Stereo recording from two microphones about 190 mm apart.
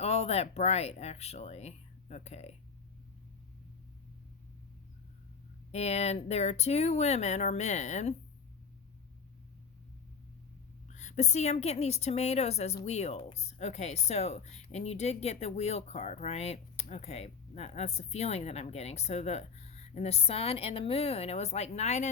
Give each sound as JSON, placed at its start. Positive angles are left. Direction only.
{"t": 0.0, "sound": "speech", "side_deg": 35}
{"t": 5.7, "sound": "speech", "side_deg": 35}
{"t": 10.8, "sound": "speech", "side_deg": 40}